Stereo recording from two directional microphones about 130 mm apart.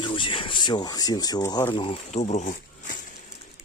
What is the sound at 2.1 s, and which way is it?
Speech, 60° left (ahead or behind).